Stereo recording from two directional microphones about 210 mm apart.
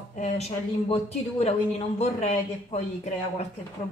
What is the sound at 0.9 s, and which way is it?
Speech, 30° left (ahead or behind).